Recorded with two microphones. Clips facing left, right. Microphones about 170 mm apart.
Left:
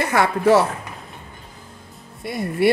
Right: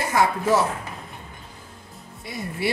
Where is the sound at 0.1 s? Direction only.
70° left (ahead or behind).